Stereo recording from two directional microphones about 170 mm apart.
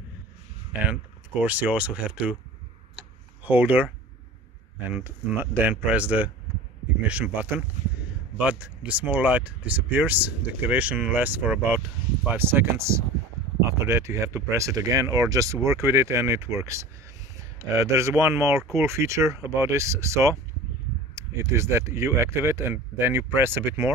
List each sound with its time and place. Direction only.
0.7 s speech: 10° right (ahead or behind)
3.0 s a sound: 10° right (ahead or behind)
4.8 s speech: 10° right (ahead or behind)